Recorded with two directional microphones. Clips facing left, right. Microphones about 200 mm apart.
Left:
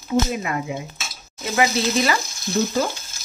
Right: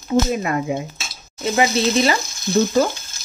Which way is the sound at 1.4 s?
25° right (ahead or behind).